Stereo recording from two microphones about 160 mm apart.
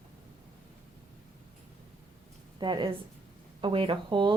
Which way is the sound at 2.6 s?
30° right (ahead or behind).